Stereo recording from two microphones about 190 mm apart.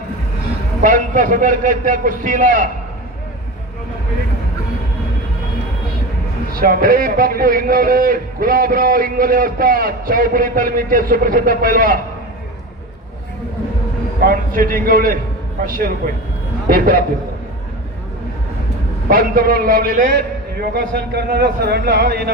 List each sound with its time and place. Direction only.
0.8 s a man's voice: 45° right (ahead or behind)
6.5 s a man's voice: 50° right (ahead or behind)
14.3 s a man's voice: 50° right (ahead or behind)
19.0 s a man's voice: 50° right (ahead or behind)